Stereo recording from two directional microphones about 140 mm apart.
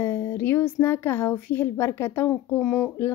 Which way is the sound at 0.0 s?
15° left (ahead or behind).